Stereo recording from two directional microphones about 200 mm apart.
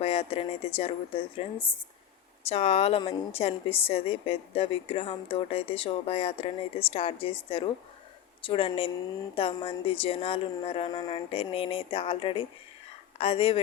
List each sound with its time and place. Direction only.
0.0 s a woman's voice: 30° left (ahead or behind)